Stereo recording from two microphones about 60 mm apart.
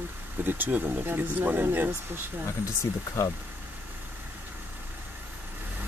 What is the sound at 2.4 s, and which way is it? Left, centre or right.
Speech, left.